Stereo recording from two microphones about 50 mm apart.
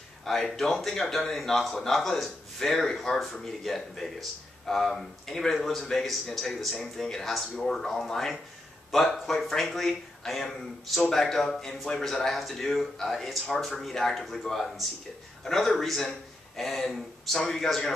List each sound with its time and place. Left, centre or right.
0.2 s a man's voice: centre